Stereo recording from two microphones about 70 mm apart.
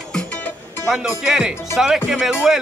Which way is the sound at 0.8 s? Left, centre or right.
Centre.